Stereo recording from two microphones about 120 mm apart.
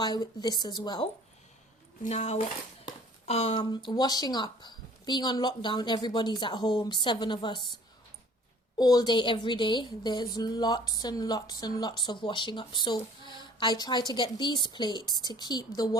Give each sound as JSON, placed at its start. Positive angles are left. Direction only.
{"t": 0.0, "sound": "a woman's voice", "side_deg": 35}
{"t": 2.0, "sound": "a woman's voice", "side_deg": 65}
{"t": 8.8, "sound": "a woman's voice", "side_deg": 30}